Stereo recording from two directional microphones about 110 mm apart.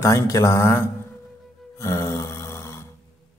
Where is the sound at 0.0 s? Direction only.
25° left (ahead or behind).